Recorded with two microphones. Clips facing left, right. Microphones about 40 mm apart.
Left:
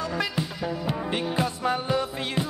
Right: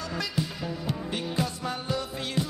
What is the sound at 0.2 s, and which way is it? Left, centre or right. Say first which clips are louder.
Music: left 3 dB; left.